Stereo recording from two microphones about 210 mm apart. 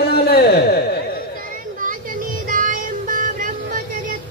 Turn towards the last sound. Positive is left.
turn(degrees=-40)  # may be behind; listen again after turning